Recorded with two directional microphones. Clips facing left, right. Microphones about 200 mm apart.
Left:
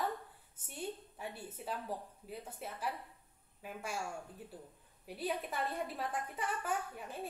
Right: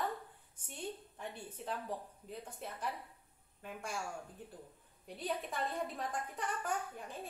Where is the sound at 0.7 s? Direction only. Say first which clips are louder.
Left 1 dB; 5° left (ahead or behind).